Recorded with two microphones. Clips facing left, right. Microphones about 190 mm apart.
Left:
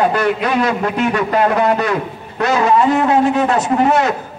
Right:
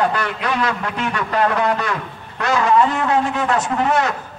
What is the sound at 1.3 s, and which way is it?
Speech, 10° left (ahead or behind).